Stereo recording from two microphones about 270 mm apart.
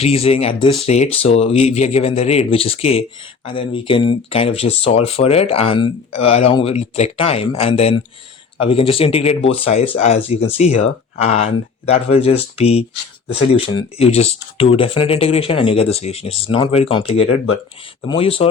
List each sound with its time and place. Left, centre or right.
0.0 s speech: left
17.2 s speech: left
18.0 s speech: centre